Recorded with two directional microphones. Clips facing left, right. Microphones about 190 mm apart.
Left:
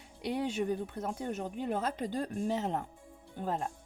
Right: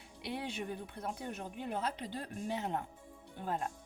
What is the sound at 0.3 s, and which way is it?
Speech, 45° left (ahead or behind).